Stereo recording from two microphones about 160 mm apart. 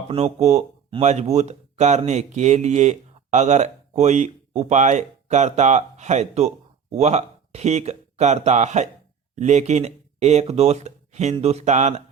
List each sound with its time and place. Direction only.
0.1 s speech: 40° right (ahead or behind)